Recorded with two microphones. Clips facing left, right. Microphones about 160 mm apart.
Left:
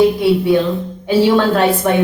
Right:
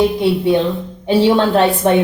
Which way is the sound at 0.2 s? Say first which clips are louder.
Left 1 dB; 20° right (ahead or behind).